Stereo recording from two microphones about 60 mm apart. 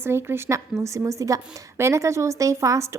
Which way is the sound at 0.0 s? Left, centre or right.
Right.